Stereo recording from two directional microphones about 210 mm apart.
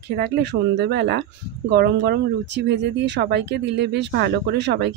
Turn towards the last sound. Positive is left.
turn(degrees=-55)  # may be behind; listen again after turning